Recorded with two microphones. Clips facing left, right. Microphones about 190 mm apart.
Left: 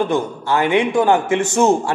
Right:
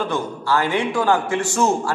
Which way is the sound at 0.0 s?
20° left (ahead or behind).